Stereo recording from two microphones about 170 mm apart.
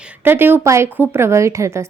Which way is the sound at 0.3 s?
10° right (ahead or behind).